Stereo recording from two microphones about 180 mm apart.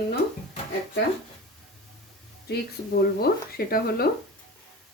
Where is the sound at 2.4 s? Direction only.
60° left (ahead or behind).